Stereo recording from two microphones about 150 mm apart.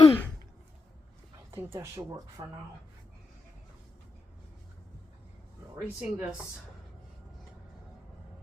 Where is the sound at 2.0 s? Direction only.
25° right (ahead or behind).